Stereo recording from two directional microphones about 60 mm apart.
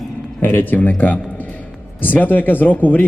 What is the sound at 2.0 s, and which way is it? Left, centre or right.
Speech, left.